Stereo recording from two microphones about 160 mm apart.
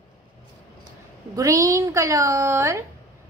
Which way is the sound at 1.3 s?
20° right (ahead or behind).